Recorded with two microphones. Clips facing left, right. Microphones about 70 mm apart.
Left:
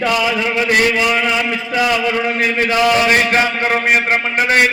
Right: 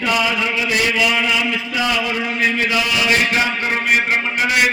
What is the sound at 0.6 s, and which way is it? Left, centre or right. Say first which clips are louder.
A man's voice: left 4 dB; left.